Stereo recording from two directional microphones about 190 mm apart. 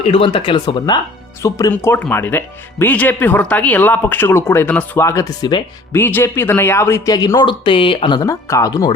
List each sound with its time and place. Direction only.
0.0 s speech: 30° left (ahead or behind)
5.9 s speech: 10° left (ahead or behind)